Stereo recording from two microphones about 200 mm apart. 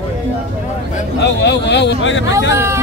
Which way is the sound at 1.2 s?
60° left (ahead or behind).